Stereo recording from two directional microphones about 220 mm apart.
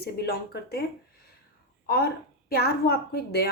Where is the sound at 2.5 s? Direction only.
45° left (ahead or behind).